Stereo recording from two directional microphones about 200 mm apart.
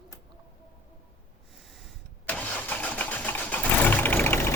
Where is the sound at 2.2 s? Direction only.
5° left (ahead or behind).